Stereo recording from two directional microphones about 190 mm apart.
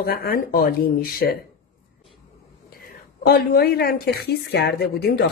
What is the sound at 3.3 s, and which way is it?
Speech, 55° left (ahead or behind).